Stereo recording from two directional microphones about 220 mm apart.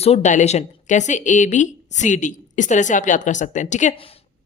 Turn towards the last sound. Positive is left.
turn(degrees=35)  # may be behind; listen again after turning